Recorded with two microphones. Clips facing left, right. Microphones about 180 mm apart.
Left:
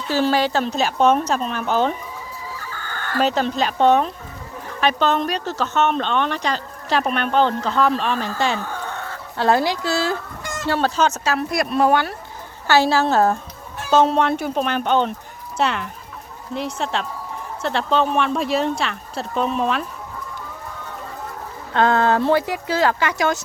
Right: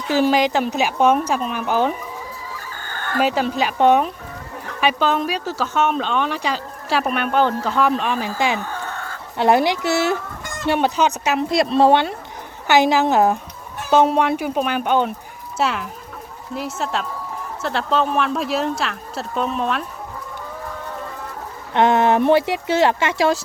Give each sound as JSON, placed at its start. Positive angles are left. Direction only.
{"t": 0.1, "sound": "speech", "side_deg": -15}
{"t": 3.2, "sound": "speech", "side_deg": -10}
{"t": 21.7, "sound": "speech", "side_deg": -20}